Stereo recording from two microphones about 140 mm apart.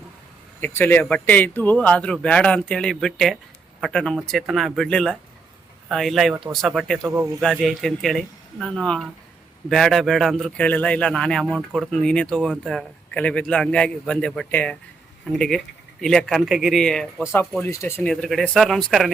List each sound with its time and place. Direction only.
0.6 s a man's voice: 15° left (ahead or behind)
7.0 s a man's voice: 15° right (ahead or behind)
7.4 s a man's voice: 5° left (ahead or behind)
17.6 s speech: 20° left (ahead or behind)
18.1 s a man's voice: centre (ahead or behind)